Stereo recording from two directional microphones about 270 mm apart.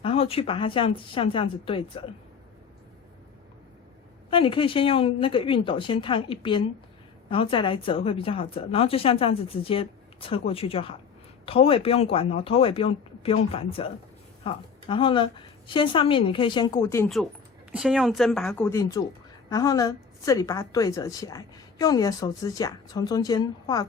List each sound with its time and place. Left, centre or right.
0.0 s a woman's voice: left
4.3 s a woman's voice: centre